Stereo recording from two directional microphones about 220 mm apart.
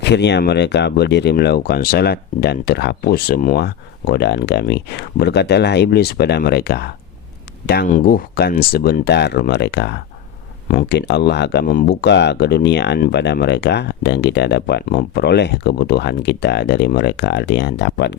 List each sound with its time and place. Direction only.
0.0 s speech: 50° left (ahead or behind)